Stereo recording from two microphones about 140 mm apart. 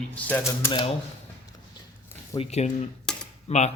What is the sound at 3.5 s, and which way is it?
Speech, 55° left (ahead or behind).